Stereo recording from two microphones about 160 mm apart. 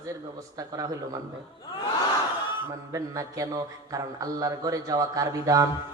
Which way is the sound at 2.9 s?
20° right (ahead or behind).